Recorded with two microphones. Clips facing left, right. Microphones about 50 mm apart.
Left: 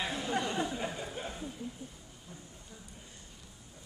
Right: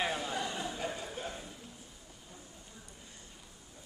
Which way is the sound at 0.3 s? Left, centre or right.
Left.